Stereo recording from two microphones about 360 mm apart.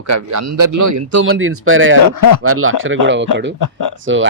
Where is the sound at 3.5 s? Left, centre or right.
Left.